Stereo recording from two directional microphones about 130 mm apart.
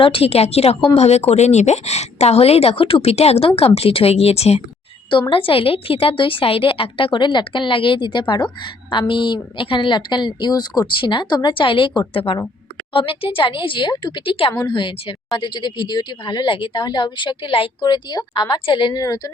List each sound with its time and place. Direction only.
0.0 s a woman's voice: 45° left (ahead or behind); by 19.3 s 30° left (ahead or behind)